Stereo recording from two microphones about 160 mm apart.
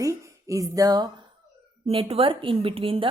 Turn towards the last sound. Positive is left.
turn(degrees=-35)  # may be behind; listen again after turning